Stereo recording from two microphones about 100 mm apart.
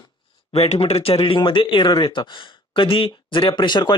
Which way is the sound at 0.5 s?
75° left (ahead or behind).